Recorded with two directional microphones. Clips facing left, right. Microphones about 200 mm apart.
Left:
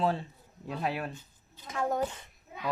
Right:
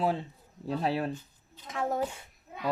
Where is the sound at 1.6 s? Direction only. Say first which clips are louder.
Even; centre (ahead or behind).